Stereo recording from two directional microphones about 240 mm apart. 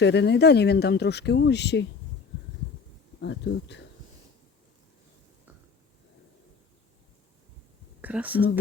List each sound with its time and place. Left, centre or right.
0.0 s speech: left
3.2 s speech: left
8.0 s speech: centre